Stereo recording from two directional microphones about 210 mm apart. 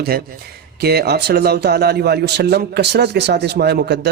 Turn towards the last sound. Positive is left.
turn(degrees=-50)  # may be behind; listen again after turning